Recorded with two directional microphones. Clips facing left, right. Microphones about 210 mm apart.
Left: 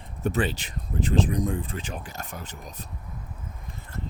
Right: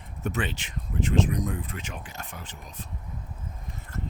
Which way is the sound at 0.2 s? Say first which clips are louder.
Left 4 dB; 35° left (ahead or behind).